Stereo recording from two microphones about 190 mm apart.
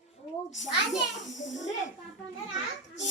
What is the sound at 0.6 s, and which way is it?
A man's voice, 40° left (ahead or behind).